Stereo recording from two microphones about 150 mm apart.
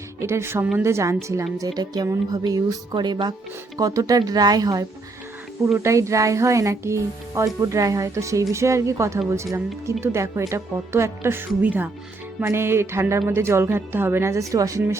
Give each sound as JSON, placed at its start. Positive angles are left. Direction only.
{"t": 0.2, "sound": "speech", "side_deg": -20}